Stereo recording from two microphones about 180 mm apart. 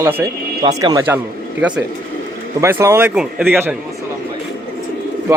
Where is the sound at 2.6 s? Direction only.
15° right (ahead or behind).